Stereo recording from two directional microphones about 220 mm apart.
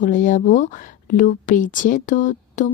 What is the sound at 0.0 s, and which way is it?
Speech, 35° left (ahead or behind).